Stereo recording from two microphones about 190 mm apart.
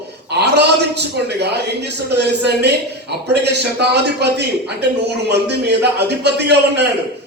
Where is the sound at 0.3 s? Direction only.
60° right (ahead or behind).